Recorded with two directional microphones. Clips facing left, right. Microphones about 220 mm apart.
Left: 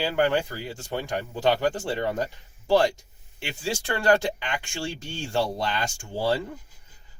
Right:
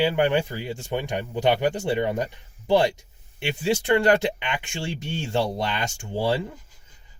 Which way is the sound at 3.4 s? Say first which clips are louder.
Right 6 dB; 20° right (ahead or behind).